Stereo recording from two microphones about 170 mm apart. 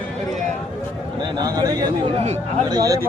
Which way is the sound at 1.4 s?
20° right (ahead or behind).